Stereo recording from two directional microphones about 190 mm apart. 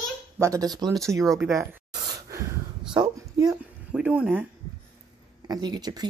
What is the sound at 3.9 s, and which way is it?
Speech, 10° right (ahead or behind).